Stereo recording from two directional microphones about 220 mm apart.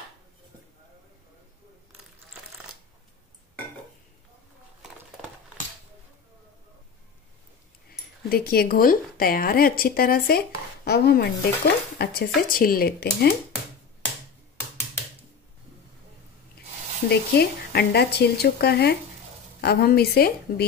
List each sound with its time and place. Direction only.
8.3 s speech: 45° left (ahead or behind)
17.1 s speech: 45° left (ahead or behind)